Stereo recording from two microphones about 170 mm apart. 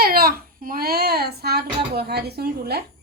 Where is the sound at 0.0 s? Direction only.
60° right (ahead or behind).